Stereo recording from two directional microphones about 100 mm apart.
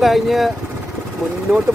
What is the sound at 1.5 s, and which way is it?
Speech, 10° right (ahead or behind).